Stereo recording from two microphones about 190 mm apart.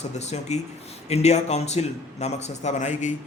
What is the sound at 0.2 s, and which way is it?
A man's voice, 35° left (ahead or behind).